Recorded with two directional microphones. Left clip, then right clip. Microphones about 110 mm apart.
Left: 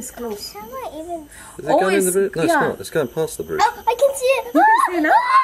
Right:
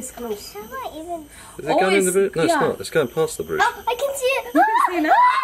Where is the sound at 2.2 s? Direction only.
15° left (ahead or behind).